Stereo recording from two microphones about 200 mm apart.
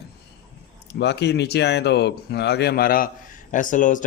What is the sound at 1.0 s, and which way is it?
A man's voice, 55° left (ahead or behind).